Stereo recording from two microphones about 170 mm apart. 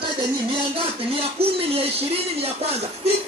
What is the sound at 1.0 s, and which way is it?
A man's voice, 35° right (ahead or behind).